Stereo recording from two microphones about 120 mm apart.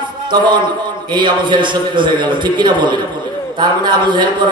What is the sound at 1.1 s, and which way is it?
A man's voice, 40° right (ahead or behind).